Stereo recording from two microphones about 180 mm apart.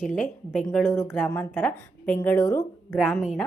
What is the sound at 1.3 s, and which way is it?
A woman's voice, 10° left (ahead or behind).